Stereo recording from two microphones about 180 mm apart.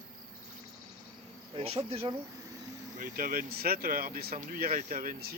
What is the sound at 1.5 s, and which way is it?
Insect, 30° right (ahead or behind).